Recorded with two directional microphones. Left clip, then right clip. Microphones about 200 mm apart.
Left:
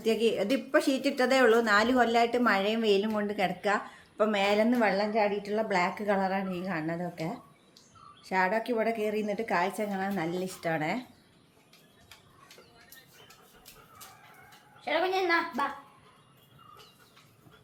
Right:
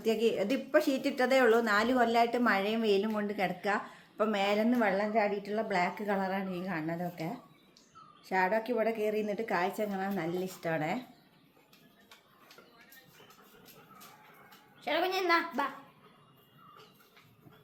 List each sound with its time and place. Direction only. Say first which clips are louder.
0.0 s speech: left 2 dB; 5° right (ahead or behind)
14.8 s a woman's voice: left 3 dB; 50° right (ahead or behind)